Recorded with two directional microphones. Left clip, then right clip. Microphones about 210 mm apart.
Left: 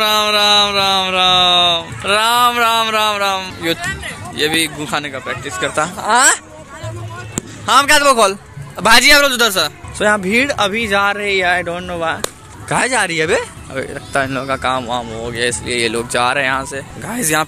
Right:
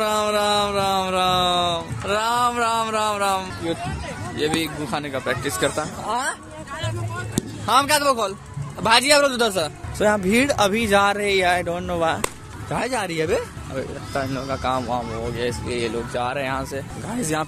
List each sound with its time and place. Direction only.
0.0 s a sound: centre (ahead or behind)
2.1 s music: 5° left (ahead or behind)
4.4 s a man's voice: centre (ahead or behind)
5.2 s speech: 20° right (ahead or behind)
6.0 s speech: 25° left (ahead or behind)
7.6 s a man's voice: centre (ahead or behind)
8.2 s a sound: 20° left (ahead or behind)
8.8 s a man's voice: centre (ahead or behind)
12.6 s a man's voice: 5° left (ahead or behind)
14.4 s a man's voice: centre (ahead or behind)